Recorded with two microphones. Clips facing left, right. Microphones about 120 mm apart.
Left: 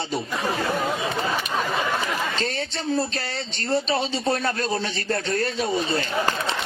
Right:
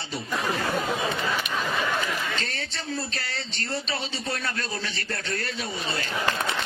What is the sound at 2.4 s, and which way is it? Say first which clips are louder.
A man's voice: left 7 dB; 30° left (ahead or behind).